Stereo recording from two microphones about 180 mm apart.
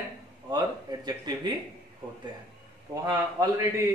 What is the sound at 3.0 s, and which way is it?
Speech, 20° right (ahead or behind).